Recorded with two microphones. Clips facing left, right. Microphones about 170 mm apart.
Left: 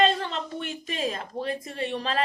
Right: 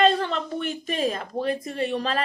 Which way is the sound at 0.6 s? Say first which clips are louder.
Right 4 dB; 40° right (ahead or behind).